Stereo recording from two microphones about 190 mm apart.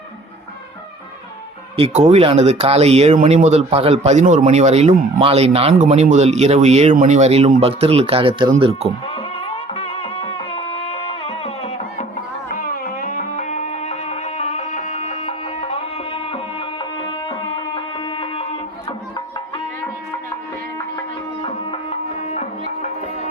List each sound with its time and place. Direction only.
1.7 s speech: 35° right (ahead or behind)
9.0 s music: 30° left (ahead or behind)
12.5 s music: 45° left (ahead or behind); by 18.4 s 25° left (ahead or behind)
21.4 s music: 30° left (ahead or behind)